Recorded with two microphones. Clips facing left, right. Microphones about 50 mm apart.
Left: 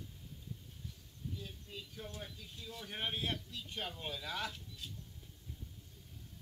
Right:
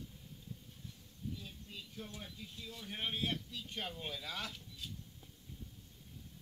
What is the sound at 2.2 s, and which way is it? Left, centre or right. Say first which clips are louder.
A man's voice: even; centre.